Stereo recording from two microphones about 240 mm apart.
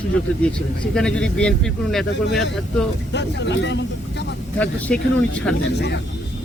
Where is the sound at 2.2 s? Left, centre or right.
Left.